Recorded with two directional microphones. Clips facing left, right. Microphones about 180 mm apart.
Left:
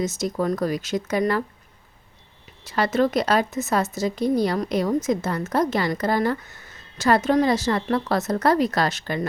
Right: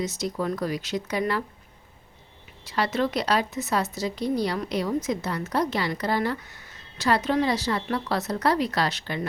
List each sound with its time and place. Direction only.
0.0 s a woman's voice: 45° left (ahead or behind)
2.6 s a woman's voice: 45° left (ahead or behind)